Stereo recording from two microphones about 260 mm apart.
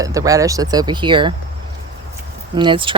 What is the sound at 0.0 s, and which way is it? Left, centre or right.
Speech, centre.